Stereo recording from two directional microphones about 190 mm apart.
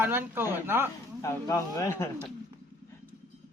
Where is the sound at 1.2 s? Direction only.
15° left (ahead or behind).